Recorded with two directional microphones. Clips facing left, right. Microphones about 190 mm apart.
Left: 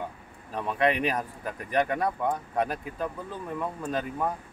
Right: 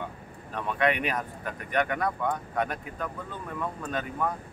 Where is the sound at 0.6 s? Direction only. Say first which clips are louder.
Left 1 dB; 35° left (ahead or behind).